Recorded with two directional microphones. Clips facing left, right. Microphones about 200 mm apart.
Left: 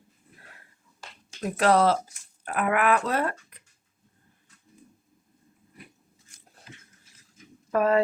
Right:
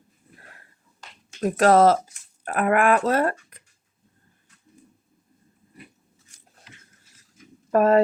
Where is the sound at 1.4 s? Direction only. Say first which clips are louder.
Right 5 dB; 45° right (ahead or behind).